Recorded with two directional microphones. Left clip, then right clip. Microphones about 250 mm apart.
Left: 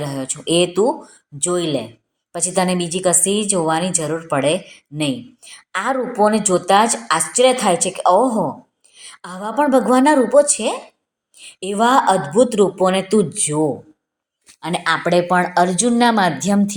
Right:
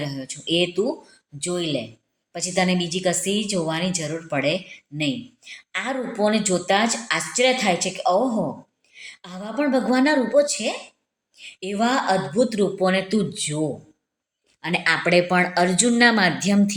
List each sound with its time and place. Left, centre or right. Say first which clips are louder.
0.0 s a woman's voice: left 6 dB; centre